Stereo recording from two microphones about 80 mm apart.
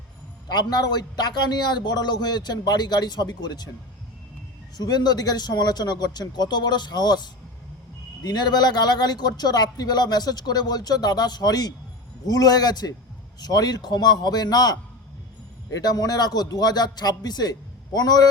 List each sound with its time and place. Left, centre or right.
0.4 s a man's voice: left
4.8 s a man's voice: left